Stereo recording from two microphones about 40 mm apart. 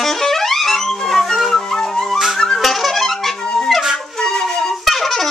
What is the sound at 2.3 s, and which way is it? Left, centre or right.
Music, centre.